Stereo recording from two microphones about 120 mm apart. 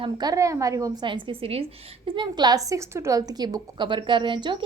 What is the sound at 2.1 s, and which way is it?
A woman's voice, 40° right (ahead or behind).